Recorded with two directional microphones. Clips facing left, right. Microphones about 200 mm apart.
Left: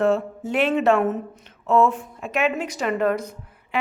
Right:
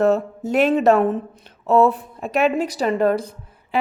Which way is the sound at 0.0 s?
40° right (ahead or behind).